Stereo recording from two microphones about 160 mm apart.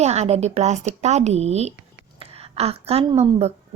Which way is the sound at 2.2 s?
40° right (ahead or behind).